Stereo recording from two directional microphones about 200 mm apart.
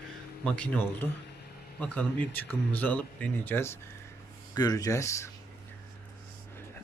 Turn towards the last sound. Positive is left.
turn(degrees=15)  # may be behind; listen again after turning